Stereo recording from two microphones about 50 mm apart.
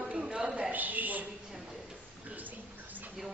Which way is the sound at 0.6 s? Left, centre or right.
Right.